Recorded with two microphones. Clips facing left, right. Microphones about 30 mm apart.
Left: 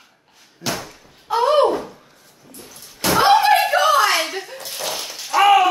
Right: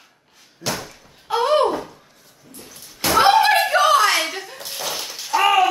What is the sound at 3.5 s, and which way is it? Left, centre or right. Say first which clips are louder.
Chuckle: left 1 dB; centre.